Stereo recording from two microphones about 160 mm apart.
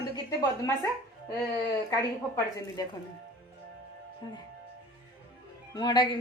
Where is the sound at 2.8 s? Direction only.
25° left (ahead or behind).